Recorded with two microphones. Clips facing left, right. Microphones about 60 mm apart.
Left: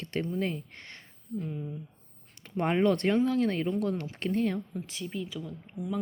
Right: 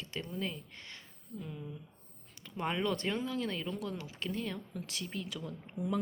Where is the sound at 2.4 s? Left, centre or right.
Left.